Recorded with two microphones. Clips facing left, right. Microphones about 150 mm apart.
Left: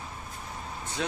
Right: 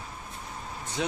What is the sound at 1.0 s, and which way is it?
Speech, 15° right (ahead or behind).